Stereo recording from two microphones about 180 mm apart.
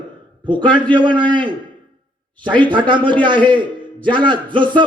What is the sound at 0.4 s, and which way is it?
A man's voice, 25° right (ahead or behind).